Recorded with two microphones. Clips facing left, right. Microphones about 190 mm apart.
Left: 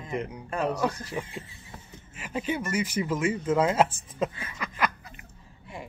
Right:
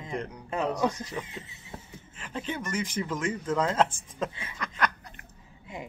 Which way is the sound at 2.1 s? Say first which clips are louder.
Left 4 dB; 10° left (ahead or behind).